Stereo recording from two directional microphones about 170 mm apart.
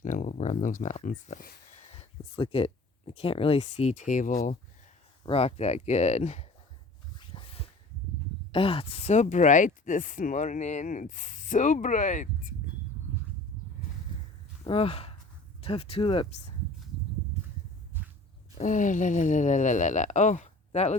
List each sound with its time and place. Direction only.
0.0 s speech: 45° left (ahead or behind)
1.7 s speech: 35° left (ahead or behind)
5.2 s speech: 35° left (ahead or behind)
7.2 s dog: 30° left (ahead or behind)
8.5 s speech: 30° left (ahead or behind); by 12.5 s 50° left (ahead or behind)
14.6 s speech: 35° left (ahead or behind)
18.5 s speech: 50° left (ahead or behind)